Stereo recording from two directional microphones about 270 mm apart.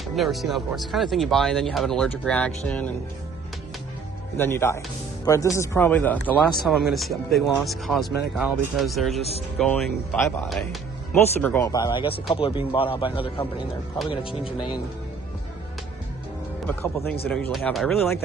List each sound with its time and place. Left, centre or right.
0.2 s speech: centre
4.4 s speech: centre
16.6 s speech: centre